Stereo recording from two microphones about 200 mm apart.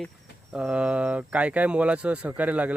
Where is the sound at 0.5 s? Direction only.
5° right (ahead or behind).